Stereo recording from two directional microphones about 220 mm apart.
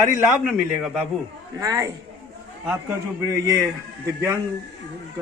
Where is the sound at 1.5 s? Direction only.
15° right (ahead or behind).